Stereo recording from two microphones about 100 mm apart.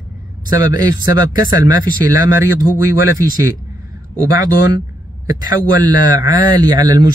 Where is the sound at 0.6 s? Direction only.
40° right (ahead or behind).